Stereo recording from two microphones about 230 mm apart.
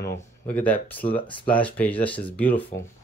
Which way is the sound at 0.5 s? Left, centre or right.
Centre.